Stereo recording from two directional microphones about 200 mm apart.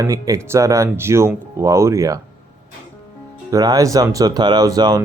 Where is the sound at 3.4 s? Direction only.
15° right (ahead or behind).